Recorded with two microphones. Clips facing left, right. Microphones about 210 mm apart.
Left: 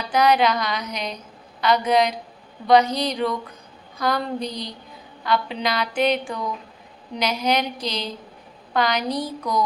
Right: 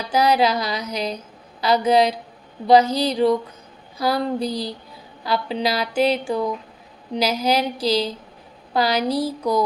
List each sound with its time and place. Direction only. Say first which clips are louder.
0.1 s music: even; 30° right (ahead or behind)
2.6 s a woman's voice: right 2 dB; 30° right (ahead or behind)
3.9 s a woman's voice: right 2 dB; 5° right (ahead or behind)
4.4 s music: right 5 dB; 30° right (ahead or behind)
8.7 s a woman's voice: right 2 dB; 30° right (ahead or behind)